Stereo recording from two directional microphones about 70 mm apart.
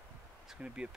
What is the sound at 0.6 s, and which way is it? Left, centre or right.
Speech, centre.